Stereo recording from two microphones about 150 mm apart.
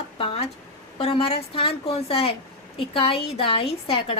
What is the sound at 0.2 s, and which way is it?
A woman's voice, 40° left (ahead or behind).